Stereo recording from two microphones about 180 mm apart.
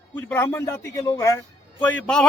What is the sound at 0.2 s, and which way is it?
A man's voice, 10° left (ahead or behind).